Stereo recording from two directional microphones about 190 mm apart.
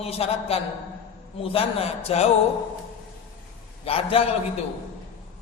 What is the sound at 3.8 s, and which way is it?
Speech, 30° left (ahead or behind).